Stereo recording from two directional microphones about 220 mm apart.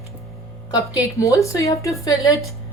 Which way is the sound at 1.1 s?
15° left (ahead or behind).